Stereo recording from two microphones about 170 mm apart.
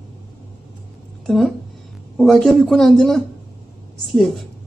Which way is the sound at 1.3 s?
Centre (ahead or behind).